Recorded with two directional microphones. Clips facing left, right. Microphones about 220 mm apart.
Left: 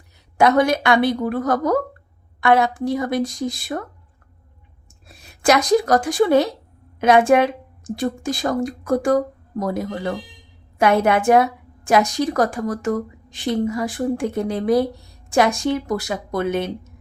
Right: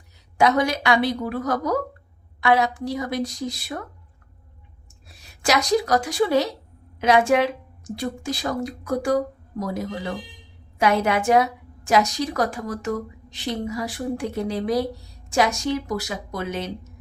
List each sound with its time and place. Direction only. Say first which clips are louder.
0.3 s a woman's voice: left 4 dB; 55° left (ahead or behind)
5.0 s a woman's voice: left 6 dB; 55° left (ahead or behind)